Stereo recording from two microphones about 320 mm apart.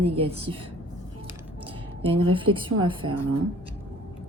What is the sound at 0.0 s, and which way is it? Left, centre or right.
Speech, centre.